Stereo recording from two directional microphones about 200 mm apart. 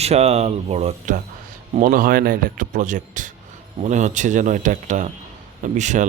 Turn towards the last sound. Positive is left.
turn(degrees=-40)  # may be behind; listen again after turning